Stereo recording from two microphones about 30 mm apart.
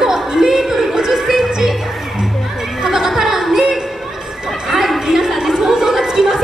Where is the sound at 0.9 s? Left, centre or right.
Centre.